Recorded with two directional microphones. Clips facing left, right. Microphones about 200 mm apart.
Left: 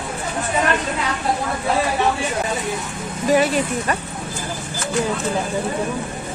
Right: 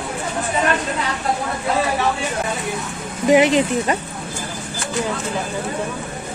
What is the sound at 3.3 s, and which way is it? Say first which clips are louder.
Speech: right 4 dB; 20° right (ahead or behind).